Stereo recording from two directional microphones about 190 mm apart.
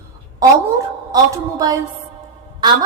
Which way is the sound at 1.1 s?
20° right (ahead or behind).